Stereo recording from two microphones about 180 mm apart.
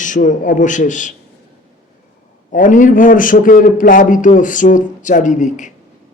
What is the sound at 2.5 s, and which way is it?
Mantra, 45° left (ahead or behind).